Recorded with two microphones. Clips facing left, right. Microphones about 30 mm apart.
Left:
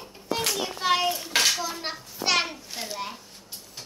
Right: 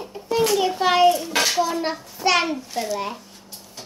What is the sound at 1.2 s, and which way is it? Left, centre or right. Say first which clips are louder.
Dishes: right 2 dB; right.